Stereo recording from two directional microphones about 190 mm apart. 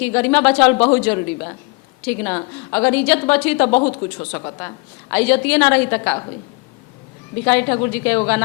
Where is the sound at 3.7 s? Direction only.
35° left (ahead or behind).